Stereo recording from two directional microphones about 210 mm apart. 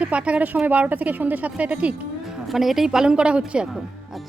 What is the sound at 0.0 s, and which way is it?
Speech, 5° right (ahead or behind).